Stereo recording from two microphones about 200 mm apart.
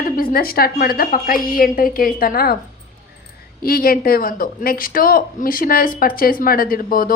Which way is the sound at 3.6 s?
45° left (ahead or behind).